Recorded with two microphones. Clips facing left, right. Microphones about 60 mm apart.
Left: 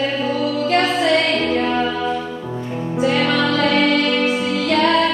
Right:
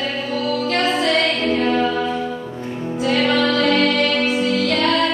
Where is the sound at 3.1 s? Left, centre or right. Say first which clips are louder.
Right 3 dB; centre.